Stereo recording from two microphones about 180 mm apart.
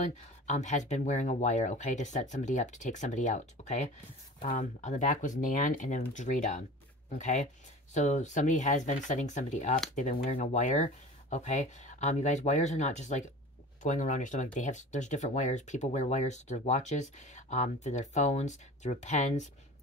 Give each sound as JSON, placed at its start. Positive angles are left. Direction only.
{"t": 0.0, "sound": "speech", "side_deg": 40}